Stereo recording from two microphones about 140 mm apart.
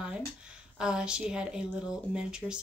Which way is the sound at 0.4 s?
5° right (ahead or behind).